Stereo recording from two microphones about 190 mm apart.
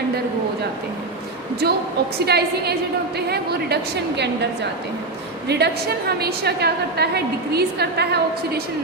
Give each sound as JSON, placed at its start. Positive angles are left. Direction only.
{"t": 1.6, "sound": "a woman's voice", "side_deg": -60}
{"t": 5.5, "sound": "a woman's voice", "side_deg": -60}